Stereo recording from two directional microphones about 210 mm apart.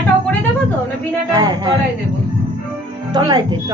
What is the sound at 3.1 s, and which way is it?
Speech, 20° right (ahead or behind).